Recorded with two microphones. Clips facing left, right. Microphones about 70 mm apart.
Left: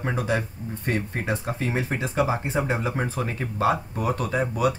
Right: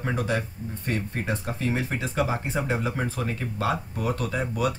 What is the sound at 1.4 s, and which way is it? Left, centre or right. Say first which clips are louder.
Speech: left 1 dB; left.